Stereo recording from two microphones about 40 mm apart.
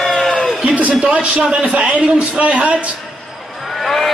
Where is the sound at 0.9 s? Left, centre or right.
Right.